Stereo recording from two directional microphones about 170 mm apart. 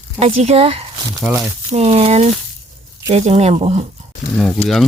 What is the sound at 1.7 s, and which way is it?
Speech, 35° right (ahead or behind).